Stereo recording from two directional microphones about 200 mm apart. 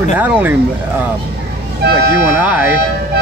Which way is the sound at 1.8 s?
55° right (ahead or behind).